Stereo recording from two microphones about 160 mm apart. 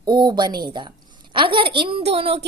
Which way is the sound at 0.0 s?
25° right (ahead or behind).